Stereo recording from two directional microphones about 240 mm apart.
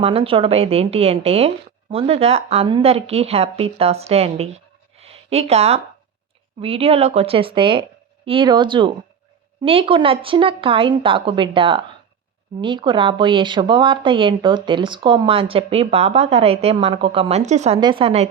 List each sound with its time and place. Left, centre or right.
0.0 s speech: right